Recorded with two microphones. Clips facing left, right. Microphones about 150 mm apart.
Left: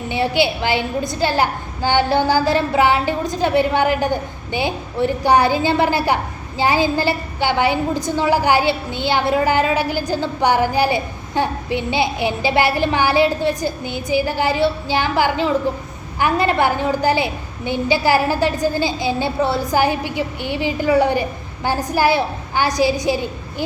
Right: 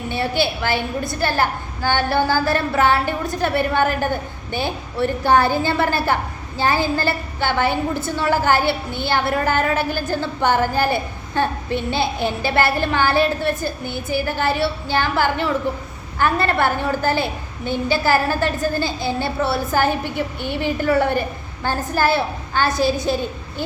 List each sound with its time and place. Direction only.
0.1 s a woman's voice: 15° left (ahead or behind)